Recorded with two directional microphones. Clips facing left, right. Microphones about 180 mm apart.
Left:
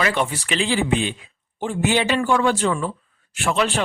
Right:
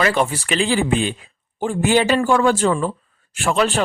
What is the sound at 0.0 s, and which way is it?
Speech, 40° right (ahead or behind).